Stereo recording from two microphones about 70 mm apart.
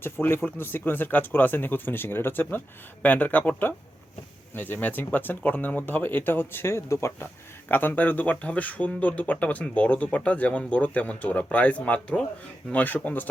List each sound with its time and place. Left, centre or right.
0.0 s speech: left
7.7 s speech: left